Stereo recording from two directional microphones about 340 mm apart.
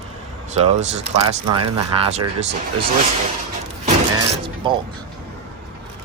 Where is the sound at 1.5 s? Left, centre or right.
Right.